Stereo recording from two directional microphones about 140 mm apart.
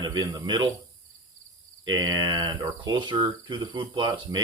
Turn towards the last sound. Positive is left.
turn(degrees=-35)  # may be behind; listen again after turning